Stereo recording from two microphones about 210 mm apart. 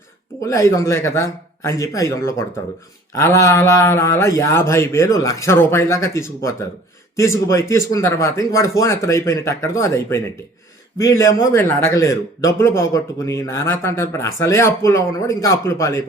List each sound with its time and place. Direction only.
0.4 s a man's voice: 15° left (ahead or behind)